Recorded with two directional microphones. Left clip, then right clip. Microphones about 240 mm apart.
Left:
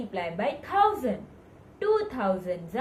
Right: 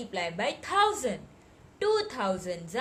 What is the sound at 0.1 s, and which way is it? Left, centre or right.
A woman's voice, right.